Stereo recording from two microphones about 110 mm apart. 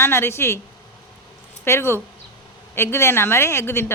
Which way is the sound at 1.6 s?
25° left (ahead or behind).